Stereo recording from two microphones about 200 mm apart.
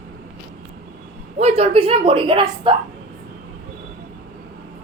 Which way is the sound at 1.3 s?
30° right (ahead or behind).